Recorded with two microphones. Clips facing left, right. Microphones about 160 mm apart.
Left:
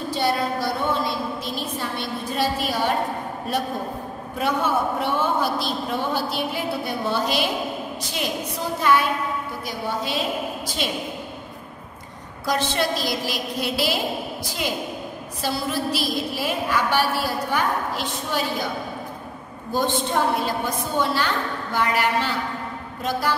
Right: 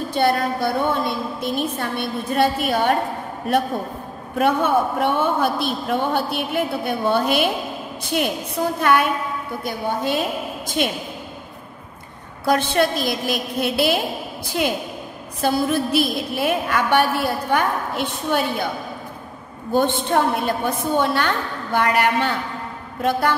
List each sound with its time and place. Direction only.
0.1 s a man's voice: 55° right (ahead or behind)
4.4 s a man's voice: 55° right (ahead or behind)
12.4 s a man's voice: 55° right (ahead or behind)
19.7 s a man's voice: 60° right (ahead or behind)